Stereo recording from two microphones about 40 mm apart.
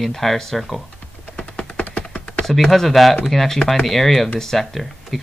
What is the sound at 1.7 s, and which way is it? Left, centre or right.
Typing, left.